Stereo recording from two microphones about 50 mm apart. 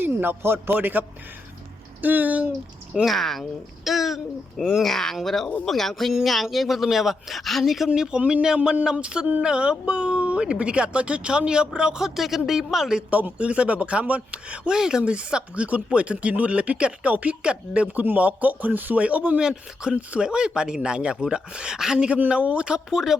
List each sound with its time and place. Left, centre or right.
0.0 s a man's voice: right
3.1 s a woman's voice: centre
4.8 s a woman's voice: centre
7.9 s speech: centre
13.1 s speech: right
14.8 s speech: centre
17.9 s speech: right
19.4 s speech: centre
21.9 s speech: right